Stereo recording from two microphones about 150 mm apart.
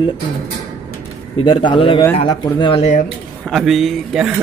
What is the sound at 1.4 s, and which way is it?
Speech, 35° left (ahead or behind).